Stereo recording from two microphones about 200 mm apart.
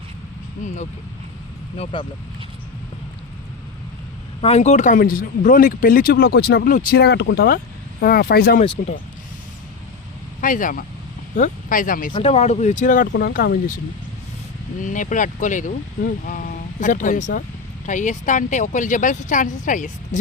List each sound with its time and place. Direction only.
1.7 s speech: 25° left (ahead or behind)
4.4 s speech: 30° left (ahead or behind); by 8.6 s 50° left (ahead or behind)
10.4 s speech: 40° left (ahead or behind)
12.1 s speech: 30° left (ahead or behind); by 13.7 s 45° left (ahead or behind)
14.8 s speech: 40° left (ahead or behind)